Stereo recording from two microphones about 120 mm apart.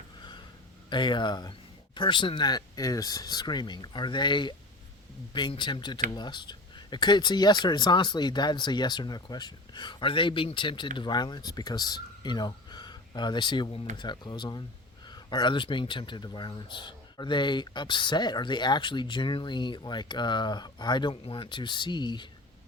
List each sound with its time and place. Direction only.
0.9 s speech: 40° left (ahead or behind)